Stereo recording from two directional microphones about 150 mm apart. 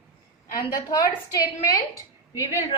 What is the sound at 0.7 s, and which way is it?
A woman's voice, 25° left (ahead or behind).